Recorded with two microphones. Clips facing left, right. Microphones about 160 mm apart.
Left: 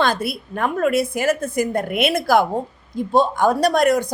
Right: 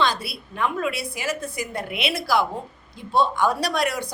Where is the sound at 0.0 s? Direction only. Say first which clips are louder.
Left 4 dB; 50° left (ahead or behind).